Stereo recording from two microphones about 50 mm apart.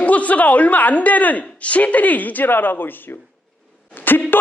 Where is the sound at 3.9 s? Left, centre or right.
Left.